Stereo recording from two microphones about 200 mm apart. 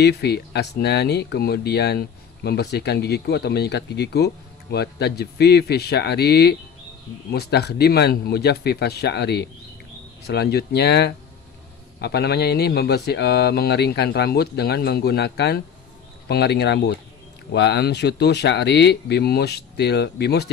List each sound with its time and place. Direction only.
0.0 s speech: 55° left (ahead or behind)